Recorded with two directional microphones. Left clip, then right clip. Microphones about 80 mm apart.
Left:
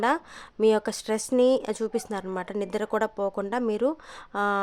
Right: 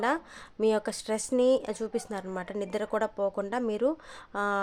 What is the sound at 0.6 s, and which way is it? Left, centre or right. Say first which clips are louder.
A woman's voice: left 4 dB; left.